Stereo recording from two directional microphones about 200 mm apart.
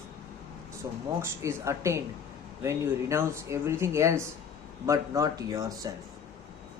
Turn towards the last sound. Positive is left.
turn(degrees=-15)  # may be behind; listen again after turning